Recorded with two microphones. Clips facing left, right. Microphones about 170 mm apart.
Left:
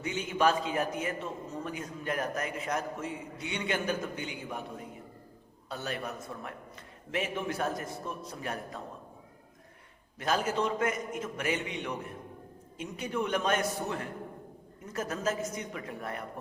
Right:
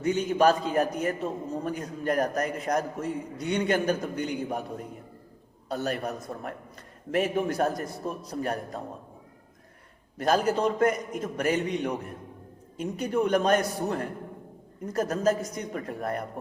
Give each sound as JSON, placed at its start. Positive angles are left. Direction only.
{"t": 0.0, "sound": "a man's voice", "side_deg": -40}
{"t": 10.2, "sound": "a man's voice", "side_deg": -40}